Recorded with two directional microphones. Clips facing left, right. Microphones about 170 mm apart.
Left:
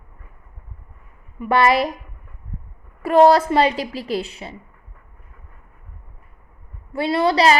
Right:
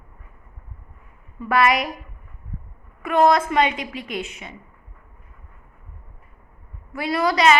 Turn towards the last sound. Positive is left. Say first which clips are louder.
# left 2 dB
turn(degrees=30)  # may be behind; listen again after turning